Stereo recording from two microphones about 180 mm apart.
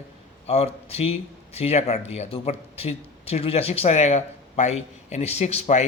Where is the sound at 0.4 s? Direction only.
35° left (ahead or behind).